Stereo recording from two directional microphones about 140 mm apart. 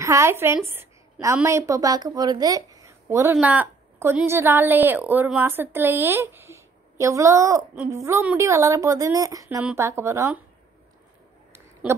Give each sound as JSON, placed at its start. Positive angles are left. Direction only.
{"t": 0.0, "sound": "a woman's voice", "side_deg": -20}